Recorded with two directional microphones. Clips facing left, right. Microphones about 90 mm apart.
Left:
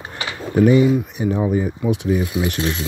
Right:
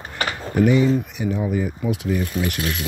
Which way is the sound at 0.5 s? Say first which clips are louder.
Left 3 dB; 35° left (ahead or behind).